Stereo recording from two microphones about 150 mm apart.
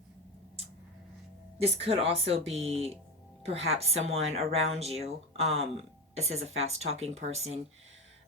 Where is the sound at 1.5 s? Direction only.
40° right (ahead or behind).